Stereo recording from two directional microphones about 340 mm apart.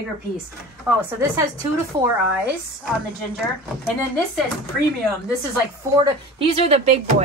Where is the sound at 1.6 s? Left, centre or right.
Centre.